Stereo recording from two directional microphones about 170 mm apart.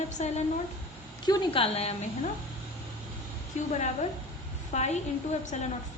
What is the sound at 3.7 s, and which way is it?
A woman's voice, 40° left (ahead or behind).